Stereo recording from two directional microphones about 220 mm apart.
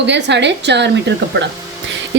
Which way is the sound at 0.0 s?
50° right (ahead or behind).